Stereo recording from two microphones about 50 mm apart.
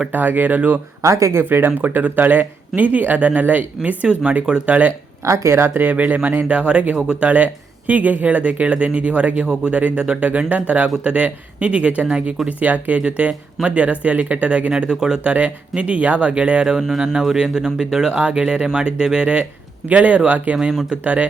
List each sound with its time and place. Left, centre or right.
0.1 s speech: right
1.0 s speech: right
1.4 s speech: right
1.8 s speech: right
3.8 s speech: right
5.2 s speech: right
5.6 s speech: right; by 7.3 s centre
7.3 s speech: right
14.7 s speech: centre
15.3 s speech: right